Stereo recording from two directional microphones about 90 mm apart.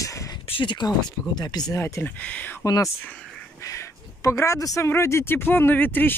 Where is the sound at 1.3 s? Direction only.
45° left (ahead or behind).